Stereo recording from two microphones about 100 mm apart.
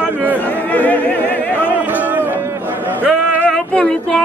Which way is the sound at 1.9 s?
15° right (ahead or behind).